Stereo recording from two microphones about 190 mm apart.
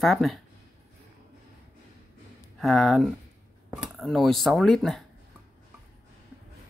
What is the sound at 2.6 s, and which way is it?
Speech, centre (ahead or behind).